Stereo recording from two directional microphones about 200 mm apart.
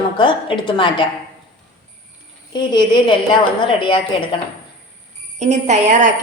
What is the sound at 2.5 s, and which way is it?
A woman's voice, 20° left (ahead or behind).